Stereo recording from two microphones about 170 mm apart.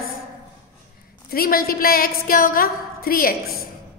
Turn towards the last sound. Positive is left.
turn(degrees=60)  # may be behind; listen again after turning